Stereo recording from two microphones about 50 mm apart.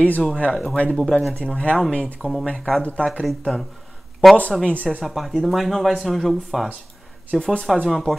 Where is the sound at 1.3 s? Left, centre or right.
Left.